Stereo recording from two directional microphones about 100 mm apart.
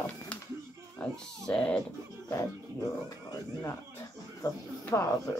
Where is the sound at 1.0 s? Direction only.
10° left (ahead or behind).